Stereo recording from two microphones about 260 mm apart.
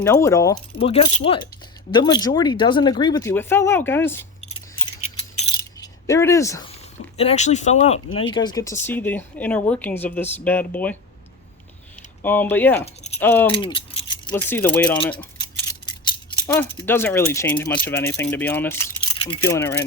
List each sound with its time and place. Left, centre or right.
0.0 s speech: centre
0.8 s speech: left
5.4 s a sound: centre
7.2 s speech: left; by 10.9 s centre
12.2 s speech: centre
12.8 s keys jangling: left
13.1 s speech: centre
13.5 s speech: centre
15.2 s a sound: centre
16.7 s speech: centre